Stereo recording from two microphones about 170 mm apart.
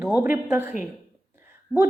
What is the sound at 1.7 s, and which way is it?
Speech, 5° left (ahead or behind).